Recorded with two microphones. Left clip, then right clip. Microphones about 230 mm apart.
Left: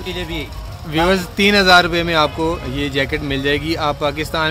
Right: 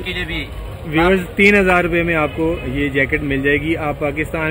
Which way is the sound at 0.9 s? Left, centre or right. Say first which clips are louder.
Right 1 dB; left.